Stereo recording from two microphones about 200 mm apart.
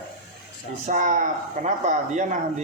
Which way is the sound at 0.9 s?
40° right (ahead or behind).